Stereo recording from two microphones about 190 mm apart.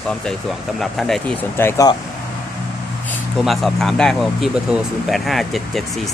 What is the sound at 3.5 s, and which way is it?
Speech, centre (ahead or behind).